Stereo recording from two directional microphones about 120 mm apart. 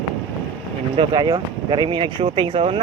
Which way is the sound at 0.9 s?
40° right (ahead or behind).